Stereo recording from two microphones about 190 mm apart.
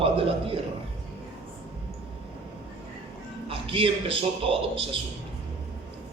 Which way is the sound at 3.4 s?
30° right (ahead or behind).